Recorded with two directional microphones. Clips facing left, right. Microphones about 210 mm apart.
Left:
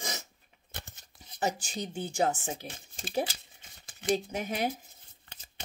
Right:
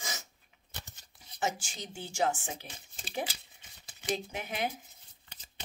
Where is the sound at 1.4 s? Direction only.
40° left (ahead or behind).